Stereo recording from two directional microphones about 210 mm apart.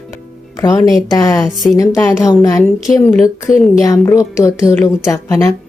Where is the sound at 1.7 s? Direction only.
15° left (ahead or behind).